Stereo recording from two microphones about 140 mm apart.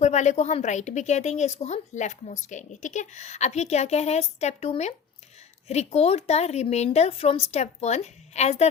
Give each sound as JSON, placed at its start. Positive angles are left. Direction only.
{"t": 0.0, "sound": "a woman's voice", "side_deg": 55}